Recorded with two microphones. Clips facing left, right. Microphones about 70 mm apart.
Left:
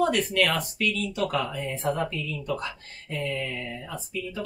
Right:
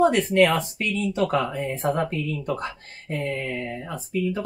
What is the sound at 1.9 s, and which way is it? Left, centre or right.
Speech, right.